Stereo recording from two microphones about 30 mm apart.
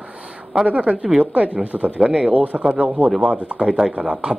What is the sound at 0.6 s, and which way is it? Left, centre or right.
Speech, right.